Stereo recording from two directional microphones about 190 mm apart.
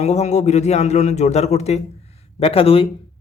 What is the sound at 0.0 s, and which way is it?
A man's voice, 35° left (ahead or behind).